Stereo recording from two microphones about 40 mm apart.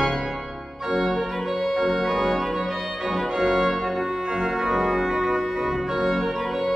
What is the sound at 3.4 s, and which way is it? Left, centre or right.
Music, centre.